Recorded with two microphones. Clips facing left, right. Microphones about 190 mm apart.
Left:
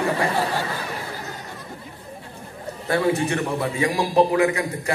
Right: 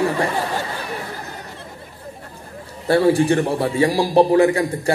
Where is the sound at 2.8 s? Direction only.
30° right (ahead or behind).